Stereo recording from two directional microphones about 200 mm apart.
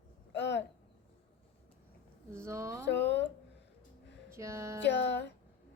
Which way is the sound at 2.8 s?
60° left (ahead or behind).